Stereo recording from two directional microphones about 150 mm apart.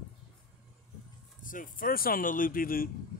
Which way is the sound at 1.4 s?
65° left (ahead or behind).